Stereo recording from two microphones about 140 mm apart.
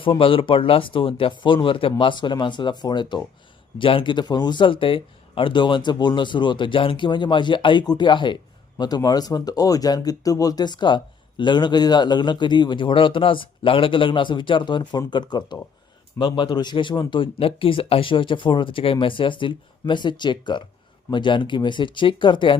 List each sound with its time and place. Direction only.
0.0 s speech: 40° left (ahead or behind)